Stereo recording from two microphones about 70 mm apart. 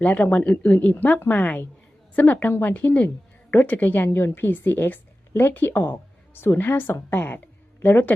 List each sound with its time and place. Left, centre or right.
0.0 s a woman's voice: left